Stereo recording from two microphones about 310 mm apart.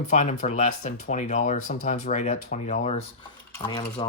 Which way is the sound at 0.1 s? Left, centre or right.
Left.